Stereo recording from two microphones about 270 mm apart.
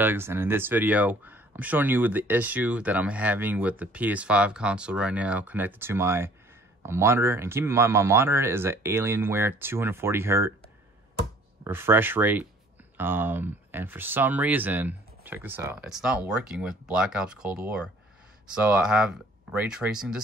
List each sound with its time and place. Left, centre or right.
0.0 s speech: centre
11.6 s speech: centre